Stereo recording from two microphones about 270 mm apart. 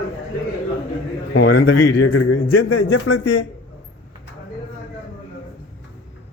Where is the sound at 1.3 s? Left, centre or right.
Left.